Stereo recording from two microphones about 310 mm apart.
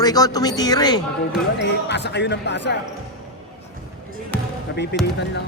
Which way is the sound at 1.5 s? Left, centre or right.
Left.